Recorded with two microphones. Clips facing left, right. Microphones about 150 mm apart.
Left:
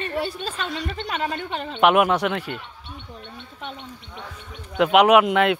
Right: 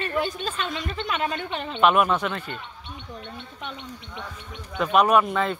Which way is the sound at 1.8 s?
70° left (ahead or behind).